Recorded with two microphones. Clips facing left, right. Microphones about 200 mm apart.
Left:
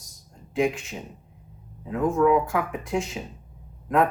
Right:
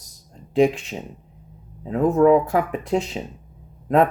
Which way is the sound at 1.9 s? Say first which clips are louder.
Right 5 dB; 35° right (ahead or behind).